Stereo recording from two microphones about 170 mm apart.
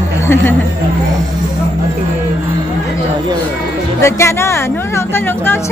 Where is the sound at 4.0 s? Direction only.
15° left (ahead or behind).